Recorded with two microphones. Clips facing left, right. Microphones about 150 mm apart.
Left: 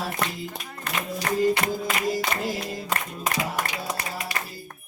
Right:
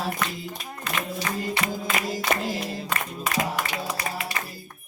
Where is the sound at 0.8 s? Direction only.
50° left (ahead or behind).